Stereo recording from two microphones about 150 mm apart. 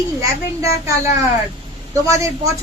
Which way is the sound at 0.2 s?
20° right (ahead or behind).